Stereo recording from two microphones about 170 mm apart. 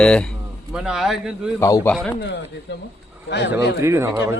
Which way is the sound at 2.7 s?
90° left.